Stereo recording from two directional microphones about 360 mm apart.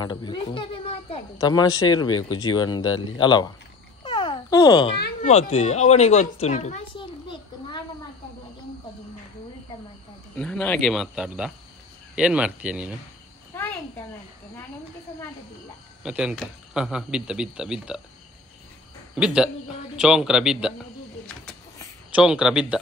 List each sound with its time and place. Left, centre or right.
0.0 s speech: centre
4.0 s a sound: centre
4.9 s speech: left
10.3 s speech: centre
13.5 s insect: centre
16.0 s speech: centre
19.1 s speech: centre
21.5 s a sound: centre